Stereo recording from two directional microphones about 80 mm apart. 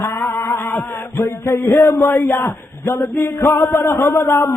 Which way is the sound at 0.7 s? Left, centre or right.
Left.